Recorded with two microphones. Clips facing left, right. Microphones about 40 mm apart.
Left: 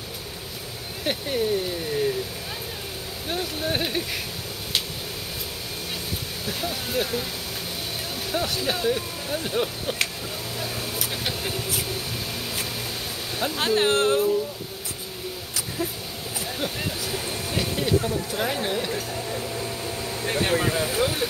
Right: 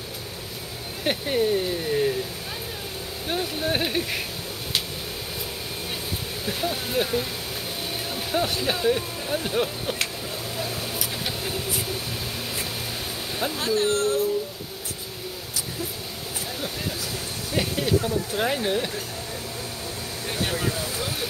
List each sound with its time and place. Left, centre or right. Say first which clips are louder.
1.0 s speech: right 2 dB; centre
3.3 s speech: right 1 dB; centre
6.4 s speech: right 3 dB; centre
8.3 s speech: right 1 dB; centre
11.2 s a sound: even; centre
13.6 s speech: left 3 dB; left
17.6 s speech: right 1 dB; centre
20.3 s speech: left 4 dB; left
20.8 s vehicle: left 6 dB; left